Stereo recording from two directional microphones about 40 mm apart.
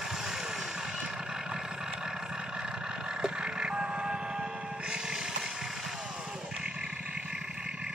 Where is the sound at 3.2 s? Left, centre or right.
Right.